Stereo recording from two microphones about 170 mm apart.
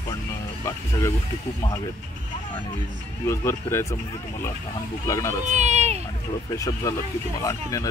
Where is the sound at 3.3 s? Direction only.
15° left (ahead or behind).